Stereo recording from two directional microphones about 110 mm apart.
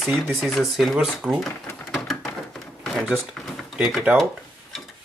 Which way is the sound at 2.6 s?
5° left (ahead or behind).